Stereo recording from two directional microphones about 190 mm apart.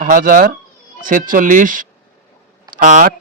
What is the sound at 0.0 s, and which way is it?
Speech, 45° right (ahead or behind).